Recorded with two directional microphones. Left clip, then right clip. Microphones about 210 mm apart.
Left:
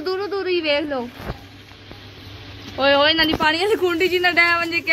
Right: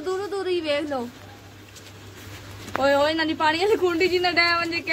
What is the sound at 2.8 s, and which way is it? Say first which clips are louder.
A woman's voice: left 5 dB; 5° left (ahead or behind).